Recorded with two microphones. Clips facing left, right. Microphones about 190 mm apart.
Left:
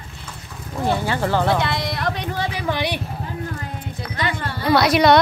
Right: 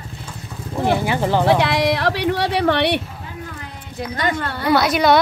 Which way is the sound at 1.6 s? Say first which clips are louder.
Right 6 dB; 70° right (ahead or behind).